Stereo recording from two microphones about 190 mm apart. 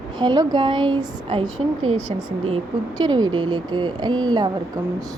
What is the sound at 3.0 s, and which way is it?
A woman's voice, 20° right (ahead or behind).